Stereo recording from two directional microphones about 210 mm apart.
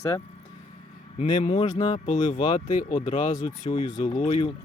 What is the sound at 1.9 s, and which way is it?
Speech, 35° left (ahead or behind).